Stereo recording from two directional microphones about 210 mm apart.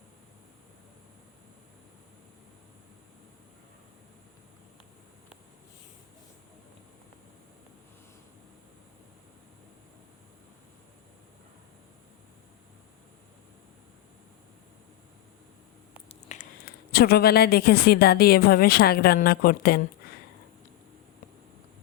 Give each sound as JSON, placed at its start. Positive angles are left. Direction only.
{"t": 16.3, "sound": "a woman's voice", "side_deg": 45}